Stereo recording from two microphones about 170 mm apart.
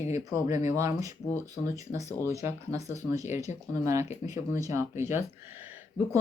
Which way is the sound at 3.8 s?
15° right (ahead or behind).